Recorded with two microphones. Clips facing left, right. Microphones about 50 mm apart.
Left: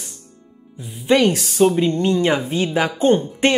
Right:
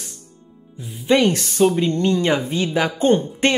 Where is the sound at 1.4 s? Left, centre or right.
Centre.